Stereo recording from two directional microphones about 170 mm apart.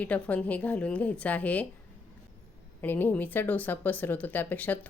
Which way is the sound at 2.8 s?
10° left (ahead or behind).